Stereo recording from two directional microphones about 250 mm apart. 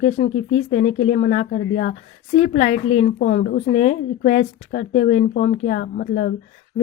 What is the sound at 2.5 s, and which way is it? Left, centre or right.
Speech, left.